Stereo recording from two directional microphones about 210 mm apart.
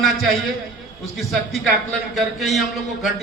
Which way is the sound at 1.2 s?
Centre (ahead or behind).